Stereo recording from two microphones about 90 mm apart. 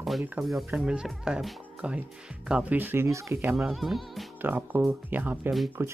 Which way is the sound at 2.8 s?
25° right (ahead or behind).